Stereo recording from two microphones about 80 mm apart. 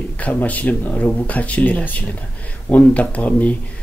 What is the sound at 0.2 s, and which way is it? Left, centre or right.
Speech, centre.